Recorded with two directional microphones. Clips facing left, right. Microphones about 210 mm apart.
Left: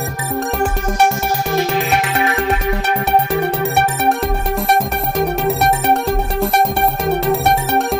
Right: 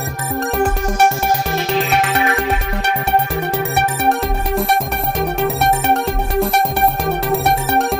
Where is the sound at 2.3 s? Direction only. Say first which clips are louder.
Left 2 dB; centre (ahead or behind).